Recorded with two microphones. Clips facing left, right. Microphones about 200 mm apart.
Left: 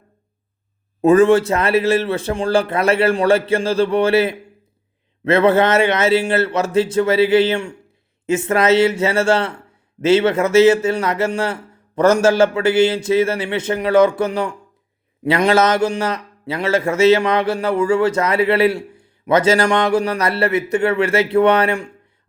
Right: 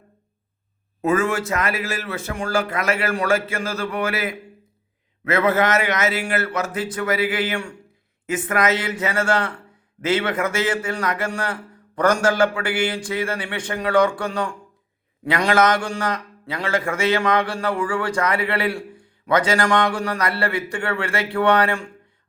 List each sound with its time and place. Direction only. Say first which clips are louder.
1.0 s a man's voice: left 9 dB; 35° left (ahead or behind)